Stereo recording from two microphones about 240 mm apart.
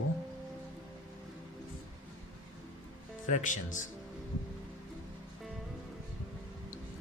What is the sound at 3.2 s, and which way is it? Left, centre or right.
Speech, left.